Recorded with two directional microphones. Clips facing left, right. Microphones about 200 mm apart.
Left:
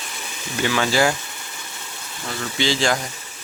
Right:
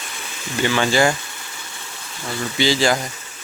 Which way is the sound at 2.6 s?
5° right (ahead or behind).